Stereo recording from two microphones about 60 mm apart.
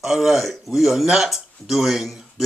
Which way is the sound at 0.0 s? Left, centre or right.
Centre.